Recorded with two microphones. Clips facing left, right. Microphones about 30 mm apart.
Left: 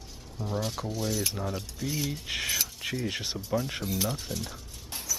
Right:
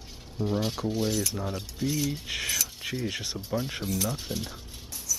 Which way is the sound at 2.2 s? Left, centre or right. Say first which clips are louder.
Even; centre.